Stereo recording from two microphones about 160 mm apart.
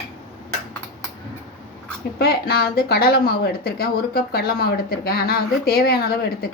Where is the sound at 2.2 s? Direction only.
70° left (ahead or behind).